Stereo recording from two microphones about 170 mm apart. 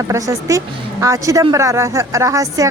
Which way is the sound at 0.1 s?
15° right (ahead or behind).